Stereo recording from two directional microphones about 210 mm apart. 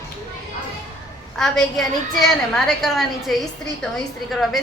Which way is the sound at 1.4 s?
Centre (ahead or behind).